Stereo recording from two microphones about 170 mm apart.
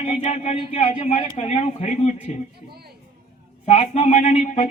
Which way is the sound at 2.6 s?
65° right (ahead or behind).